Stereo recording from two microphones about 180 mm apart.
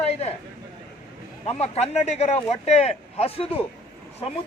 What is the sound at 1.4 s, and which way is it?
Speech, 35° left (ahead or behind).